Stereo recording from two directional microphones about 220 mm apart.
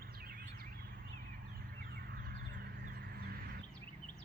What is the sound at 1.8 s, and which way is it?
Duck, 45° right (ahead or behind).